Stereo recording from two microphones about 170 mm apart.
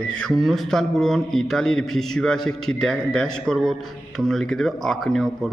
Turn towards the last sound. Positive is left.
turn(degrees=0)  # may be behind; listen again after turning